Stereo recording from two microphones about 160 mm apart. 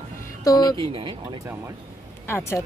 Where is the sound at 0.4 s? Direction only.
25° left (ahead or behind).